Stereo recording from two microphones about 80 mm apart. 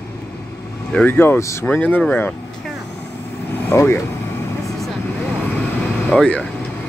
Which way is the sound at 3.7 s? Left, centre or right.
Left.